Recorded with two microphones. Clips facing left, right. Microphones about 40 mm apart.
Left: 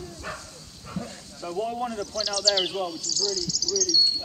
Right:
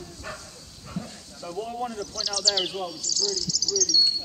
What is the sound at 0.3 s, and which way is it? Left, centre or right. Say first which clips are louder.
Bow-wow: left 2 dB; centre.